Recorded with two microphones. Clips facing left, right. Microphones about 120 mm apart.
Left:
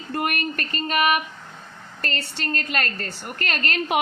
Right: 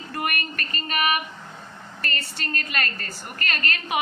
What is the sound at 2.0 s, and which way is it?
Speech, 35° left (ahead or behind).